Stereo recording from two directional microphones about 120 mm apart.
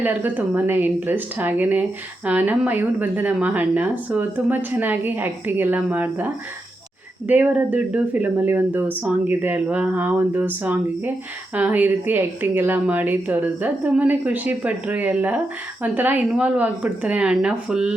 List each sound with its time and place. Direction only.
0.0 s speech: 15° right (ahead or behind)